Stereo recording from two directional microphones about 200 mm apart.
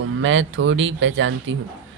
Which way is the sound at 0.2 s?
70° right (ahead or behind).